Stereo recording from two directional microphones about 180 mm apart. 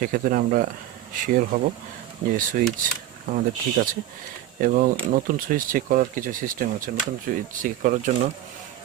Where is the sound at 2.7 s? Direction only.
50° right (ahead or behind).